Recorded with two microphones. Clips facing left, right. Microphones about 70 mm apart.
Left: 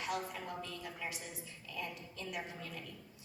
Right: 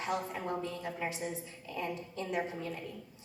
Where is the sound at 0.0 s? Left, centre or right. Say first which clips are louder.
Right 4 dB; right.